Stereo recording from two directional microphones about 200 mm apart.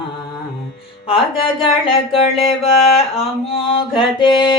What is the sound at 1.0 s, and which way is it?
Speech, 25° left (ahead or behind).